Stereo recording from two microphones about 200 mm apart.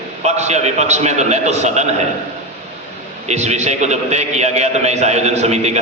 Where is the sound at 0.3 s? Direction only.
35° right (ahead or behind).